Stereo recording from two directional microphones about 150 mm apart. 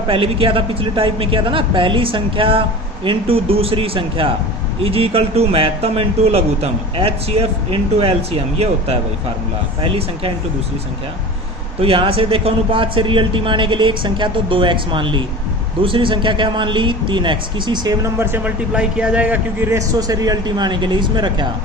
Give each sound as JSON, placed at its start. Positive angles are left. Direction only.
{"t": 0.1, "sound": "speech", "side_deg": -35}
{"t": 11.8, "sound": "a man's voice", "side_deg": -40}